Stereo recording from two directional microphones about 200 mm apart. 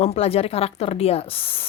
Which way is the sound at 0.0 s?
30° left (ahead or behind).